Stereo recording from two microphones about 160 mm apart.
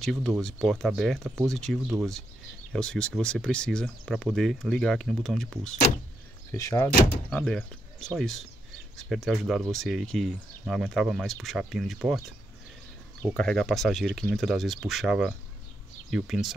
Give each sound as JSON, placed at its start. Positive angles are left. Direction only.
{"t": 0.0, "sound": "speech", "side_deg": 0}
{"t": 6.5, "sound": "speech", "side_deg": 20}
{"t": 7.3, "sound": "speech", "side_deg": 5}
{"t": 13.4, "sound": "speech", "side_deg": 0}